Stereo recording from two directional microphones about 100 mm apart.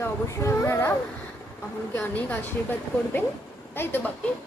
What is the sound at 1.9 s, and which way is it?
Speech, 20° left (ahead or behind).